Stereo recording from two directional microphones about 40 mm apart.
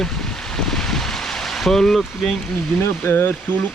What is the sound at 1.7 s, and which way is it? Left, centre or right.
Speech, centre.